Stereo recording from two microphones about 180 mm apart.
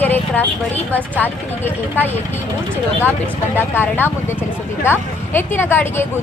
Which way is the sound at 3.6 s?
10° left (ahead or behind).